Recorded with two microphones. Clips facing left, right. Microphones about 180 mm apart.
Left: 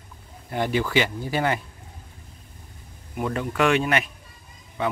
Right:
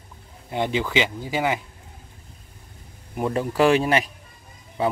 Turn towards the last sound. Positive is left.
turn(degrees=-35)  # may be behind; listen again after turning